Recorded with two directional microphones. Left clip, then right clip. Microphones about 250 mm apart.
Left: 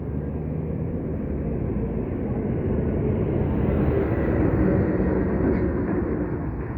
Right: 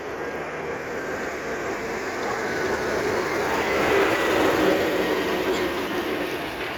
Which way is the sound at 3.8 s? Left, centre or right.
Right.